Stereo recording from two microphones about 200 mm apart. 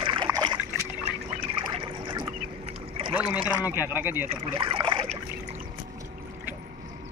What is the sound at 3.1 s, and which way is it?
Speech, 10° right (ahead or behind).